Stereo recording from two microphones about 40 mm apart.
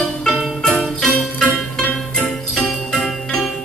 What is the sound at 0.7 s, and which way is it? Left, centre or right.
Jingle bell, centre.